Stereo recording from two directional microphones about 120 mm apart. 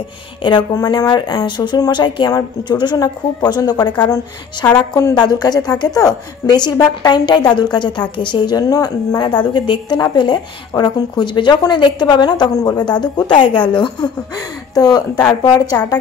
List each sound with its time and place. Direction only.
0.4 s speech: 40° left (ahead or behind)